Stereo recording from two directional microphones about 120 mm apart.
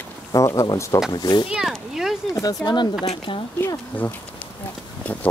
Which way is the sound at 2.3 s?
35° left (ahead or behind).